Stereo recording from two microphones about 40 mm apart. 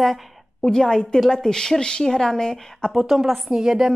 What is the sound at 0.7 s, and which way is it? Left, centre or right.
Speech, centre.